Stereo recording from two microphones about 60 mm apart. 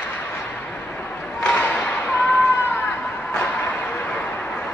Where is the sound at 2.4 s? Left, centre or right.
Left.